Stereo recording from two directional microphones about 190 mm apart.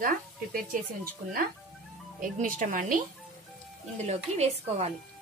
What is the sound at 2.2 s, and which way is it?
Speech, 45° right (ahead or behind).